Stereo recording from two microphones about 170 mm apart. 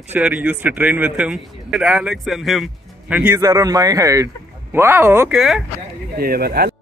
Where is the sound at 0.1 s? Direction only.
10° right (ahead or behind).